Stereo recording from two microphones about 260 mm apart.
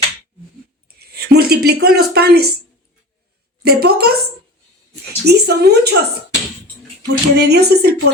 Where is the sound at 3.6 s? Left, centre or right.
Right.